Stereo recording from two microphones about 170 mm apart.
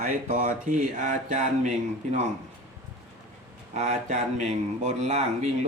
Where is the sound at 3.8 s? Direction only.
40° right (ahead or behind).